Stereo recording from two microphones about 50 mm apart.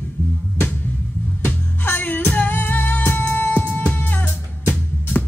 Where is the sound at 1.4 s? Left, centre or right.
Left.